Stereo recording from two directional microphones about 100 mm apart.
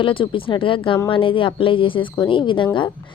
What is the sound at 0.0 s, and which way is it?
A woman's voice, 60° left (ahead or behind).